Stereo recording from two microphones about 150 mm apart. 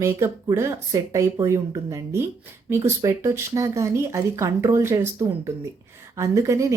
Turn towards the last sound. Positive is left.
turn(degrees=-20)  # may be behind; listen again after turning